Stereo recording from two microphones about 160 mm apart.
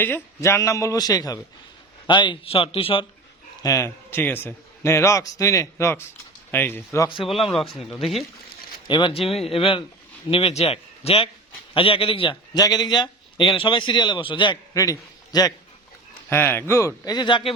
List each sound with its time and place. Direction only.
0.0 s a man's voice: 15° left (ahead or behind); by 3.1 s 35° left (ahead or behind)
3.6 s a man's voice: 20° left (ahead or behind)
7.9 s speech: centre (ahead or behind)
8.9 s a man's voice: 30° left (ahead or behind)
16.3 s a man's voice: 15° left (ahead or behind); by 17.5 s 30° left (ahead or behind)